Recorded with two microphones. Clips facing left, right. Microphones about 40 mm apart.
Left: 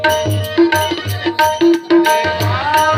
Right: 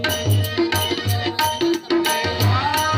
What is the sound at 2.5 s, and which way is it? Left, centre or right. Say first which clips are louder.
Music: left 7 dB; left.